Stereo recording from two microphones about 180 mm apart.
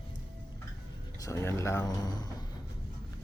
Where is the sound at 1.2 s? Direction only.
15° left (ahead or behind).